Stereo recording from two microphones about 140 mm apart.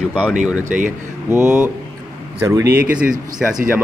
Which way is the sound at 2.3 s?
20° right (ahead or behind).